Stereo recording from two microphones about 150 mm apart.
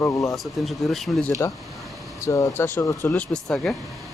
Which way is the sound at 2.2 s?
20° left (ahead or behind).